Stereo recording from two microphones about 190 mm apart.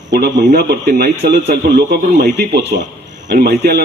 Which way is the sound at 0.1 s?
60° right (ahead or behind).